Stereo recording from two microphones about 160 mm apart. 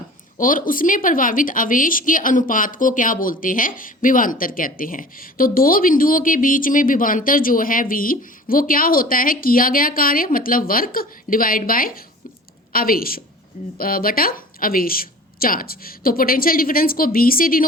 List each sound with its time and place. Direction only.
0.3 s a woman's voice: 60° left (ahead or behind)